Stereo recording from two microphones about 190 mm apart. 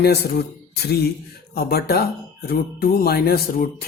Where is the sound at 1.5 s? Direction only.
55° left (ahead or behind).